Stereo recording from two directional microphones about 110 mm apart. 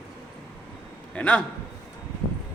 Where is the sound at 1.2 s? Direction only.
10° left (ahead or behind).